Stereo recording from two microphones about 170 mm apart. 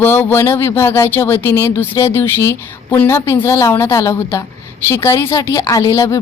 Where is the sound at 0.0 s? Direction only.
10° left (ahead or behind).